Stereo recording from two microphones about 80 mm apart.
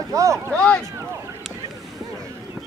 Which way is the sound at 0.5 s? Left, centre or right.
Centre.